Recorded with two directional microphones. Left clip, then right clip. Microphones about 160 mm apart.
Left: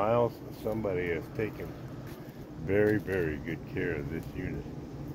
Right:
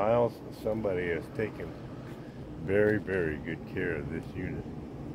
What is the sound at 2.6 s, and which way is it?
Speech, 20° left (ahead or behind).